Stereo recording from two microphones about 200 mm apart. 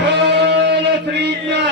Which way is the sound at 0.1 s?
55° right (ahead or behind).